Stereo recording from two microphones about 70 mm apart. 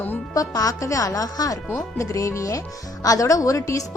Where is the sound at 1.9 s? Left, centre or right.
Left.